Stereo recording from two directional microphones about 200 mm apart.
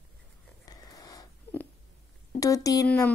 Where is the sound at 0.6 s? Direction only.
20° left (ahead or behind).